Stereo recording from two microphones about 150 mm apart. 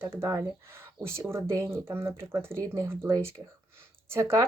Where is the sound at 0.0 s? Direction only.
15° right (ahead or behind).